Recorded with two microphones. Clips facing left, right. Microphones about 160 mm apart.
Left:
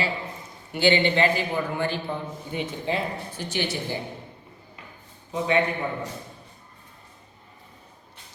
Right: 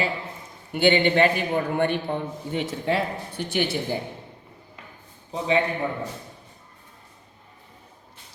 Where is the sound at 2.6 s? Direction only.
70° right (ahead or behind); by 3.7 s 55° right (ahead or behind).